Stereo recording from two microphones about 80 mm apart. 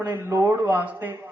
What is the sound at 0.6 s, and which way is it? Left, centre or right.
Speech, right.